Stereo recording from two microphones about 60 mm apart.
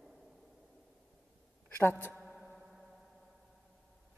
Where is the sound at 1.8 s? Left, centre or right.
Left.